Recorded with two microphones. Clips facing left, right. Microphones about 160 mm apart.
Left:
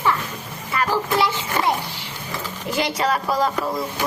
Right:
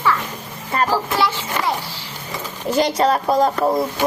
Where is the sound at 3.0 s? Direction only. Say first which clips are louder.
Right 4 dB; 40° right (ahead or behind).